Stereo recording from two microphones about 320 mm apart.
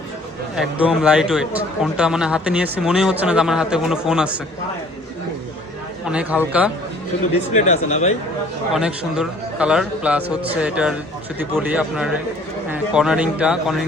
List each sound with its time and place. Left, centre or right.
0.5 s a man's voice: centre
6.1 s a man's voice: centre
7.5 s speech: left
8.7 s a man's voice: centre